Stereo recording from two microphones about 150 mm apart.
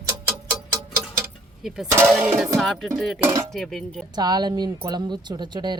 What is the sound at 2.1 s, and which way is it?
Speech, 5° right (ahead or behind).